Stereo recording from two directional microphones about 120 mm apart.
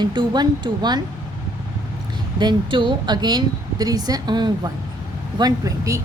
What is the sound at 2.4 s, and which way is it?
A woman's voice, 40° right (ahead or behind).